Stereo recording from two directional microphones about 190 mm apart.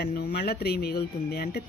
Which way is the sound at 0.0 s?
55° left (ahead or behind).